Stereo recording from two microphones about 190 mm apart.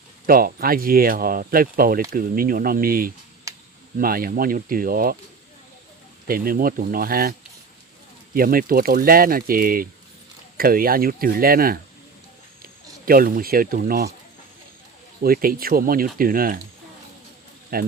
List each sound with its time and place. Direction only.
0.3 s speech: 50° right (ahead or behind)
6.2 s speech: 50° right (ahead or behind)
13.1 s speech: 50° right (ahead or behind)
15.2 s speech: 50° right (ahead or behind)
17.7 s speech: 50° right (ahead or behind)